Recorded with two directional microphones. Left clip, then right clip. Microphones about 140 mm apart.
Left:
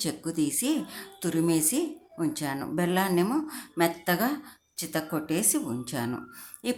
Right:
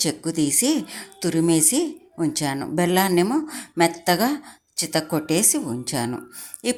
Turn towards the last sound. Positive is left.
turn(degrees=-25)  # may be behind; listen again after turning